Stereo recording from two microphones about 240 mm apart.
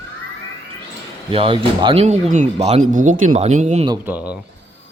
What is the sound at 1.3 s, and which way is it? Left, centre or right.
Speech, right.